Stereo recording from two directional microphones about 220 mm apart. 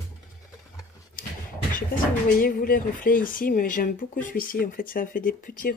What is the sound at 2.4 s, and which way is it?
Speech, 40° left (ahead or behind).